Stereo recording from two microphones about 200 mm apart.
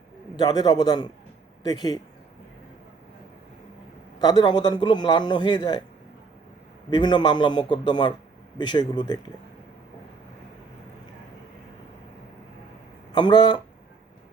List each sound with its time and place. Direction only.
0.3 s a man's voice: 20° left (ahead or behind)
4.2 s a man's voice: 20° left (ahead or behind)
6.9 s a man's voice: 20° left (ahead or behind)
13.1 s speech: 20° left (ahead or behind)